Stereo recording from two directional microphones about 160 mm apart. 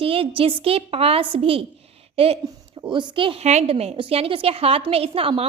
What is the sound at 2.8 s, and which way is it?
A woman's voice, 30° right (ahead or behind).